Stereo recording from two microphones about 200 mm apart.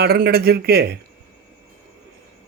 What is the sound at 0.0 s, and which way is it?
Speech, 50° right (ahead or behind).